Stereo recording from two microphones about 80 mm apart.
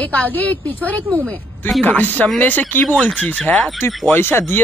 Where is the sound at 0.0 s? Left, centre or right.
Centre.